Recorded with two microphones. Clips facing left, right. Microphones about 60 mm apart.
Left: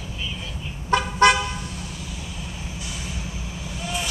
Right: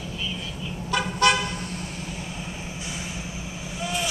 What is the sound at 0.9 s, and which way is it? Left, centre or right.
Car, left.